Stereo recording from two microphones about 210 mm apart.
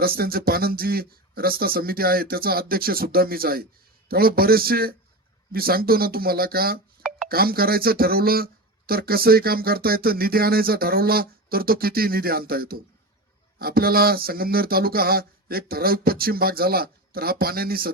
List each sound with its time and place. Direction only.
0.0 s speech: 45° right (ahead or behind)